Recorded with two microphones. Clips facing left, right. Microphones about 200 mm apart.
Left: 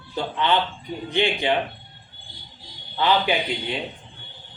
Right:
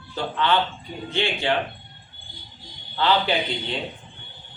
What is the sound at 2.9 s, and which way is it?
Speech, 15° left (ahead or behind).